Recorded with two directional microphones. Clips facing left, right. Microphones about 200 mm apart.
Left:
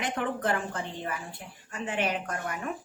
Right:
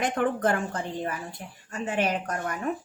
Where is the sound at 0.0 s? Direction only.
45° right (ahead or behind).